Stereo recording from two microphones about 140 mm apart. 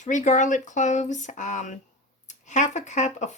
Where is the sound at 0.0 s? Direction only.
60° left (ahead or behind).